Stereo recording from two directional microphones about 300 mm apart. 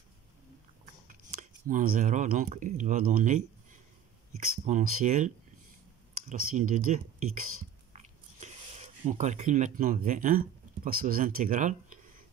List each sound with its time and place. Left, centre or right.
1.0 s speech: right
4.6 s speech: right